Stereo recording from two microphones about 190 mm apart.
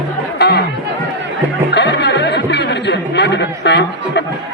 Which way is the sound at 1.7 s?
65° left (ahead or behind).